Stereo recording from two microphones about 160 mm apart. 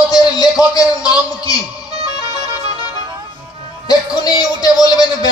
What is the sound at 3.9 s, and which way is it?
A man's voice, 25° left (ahead or behind).